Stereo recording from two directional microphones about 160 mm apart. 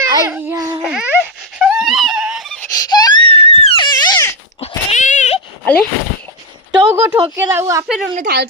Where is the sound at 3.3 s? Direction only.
40° left (ahead or behind); by 4.3 s 25° left (ahead or behind).